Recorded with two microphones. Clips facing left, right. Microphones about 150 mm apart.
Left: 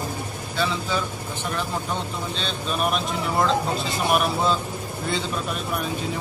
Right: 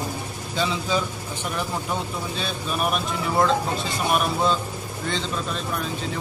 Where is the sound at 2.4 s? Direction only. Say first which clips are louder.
Left 1 dB; 5° right (ahead or behind).